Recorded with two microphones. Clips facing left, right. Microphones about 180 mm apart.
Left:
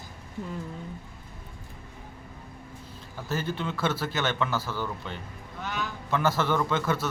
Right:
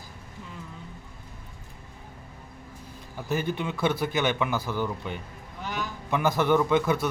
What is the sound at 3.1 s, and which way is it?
A man's voice, 15° right (ahead or behind).